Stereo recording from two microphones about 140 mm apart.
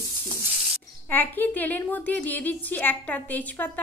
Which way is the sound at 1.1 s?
15° left (ahead or behind).